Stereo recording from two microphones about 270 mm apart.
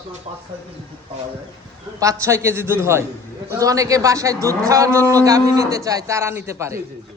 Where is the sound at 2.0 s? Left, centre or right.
Centre.